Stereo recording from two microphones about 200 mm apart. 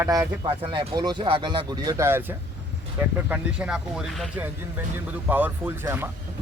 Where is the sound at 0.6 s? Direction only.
25° right (ahead or behind).